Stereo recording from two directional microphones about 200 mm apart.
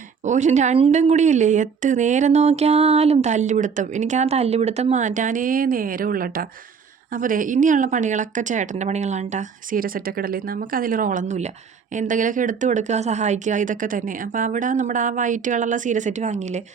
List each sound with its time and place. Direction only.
0.3 s a woman's voice: 35° right (ahead or behind)